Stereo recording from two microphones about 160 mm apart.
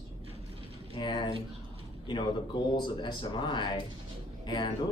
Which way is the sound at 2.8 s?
30° left (ahead or behind).